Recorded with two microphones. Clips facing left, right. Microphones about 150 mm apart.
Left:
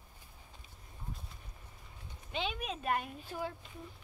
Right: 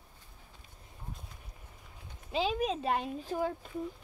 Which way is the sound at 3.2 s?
45° right (ahead or behind).